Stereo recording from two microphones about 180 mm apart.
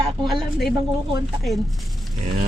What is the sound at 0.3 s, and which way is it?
Speech, centre (ahead or behind).